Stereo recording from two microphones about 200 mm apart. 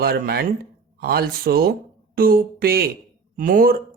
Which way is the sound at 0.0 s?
50° right (ahead or behind).